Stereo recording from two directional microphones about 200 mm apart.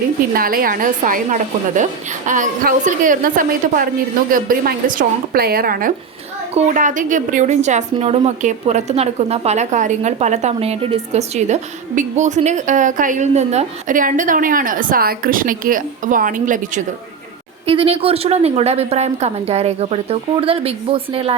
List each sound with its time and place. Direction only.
0.3 s a woman's voice: 45° right (ahead or behind)
17.7 s a woman's voice: 30° right (ahead or behind)